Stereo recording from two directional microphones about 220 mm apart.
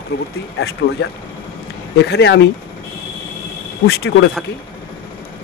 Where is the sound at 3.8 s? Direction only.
45° left (ahead or behind).